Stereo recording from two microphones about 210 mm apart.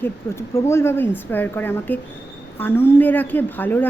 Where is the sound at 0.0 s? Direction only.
10° left (ahead or behind).